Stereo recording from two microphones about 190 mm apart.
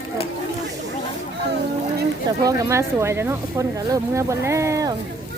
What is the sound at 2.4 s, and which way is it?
Speech, 20° right (ahead or behind).